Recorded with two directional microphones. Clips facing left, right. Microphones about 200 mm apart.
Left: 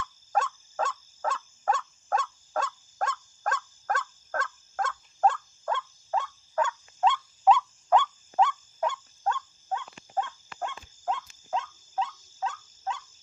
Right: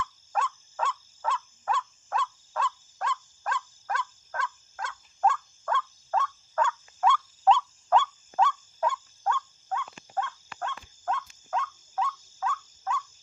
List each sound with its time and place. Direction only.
0.0 s fowl: 40° left (ahead or behind)
5.6 s a sound: 20° left (ahead or behind)
7.5 s fowl: 15° left (ahead or behind)